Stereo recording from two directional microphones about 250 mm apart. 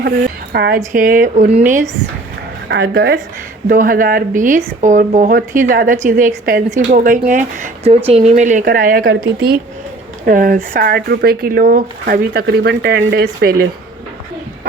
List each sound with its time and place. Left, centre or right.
0.5 s speech: right
2.6 s speech: right